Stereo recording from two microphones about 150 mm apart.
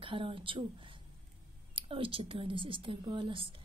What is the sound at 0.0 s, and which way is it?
A woman's voice, 35° right (ahead or behind).